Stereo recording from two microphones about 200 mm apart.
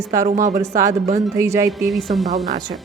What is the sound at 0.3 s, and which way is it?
Speech, 40° right (ahead or behind).